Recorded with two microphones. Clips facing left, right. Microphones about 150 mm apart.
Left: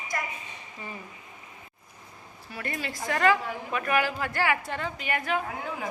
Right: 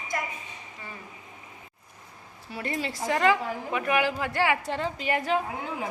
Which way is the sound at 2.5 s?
25° right (ahead or behind).